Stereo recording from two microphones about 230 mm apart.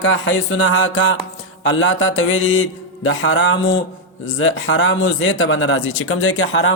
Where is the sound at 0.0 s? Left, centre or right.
Left.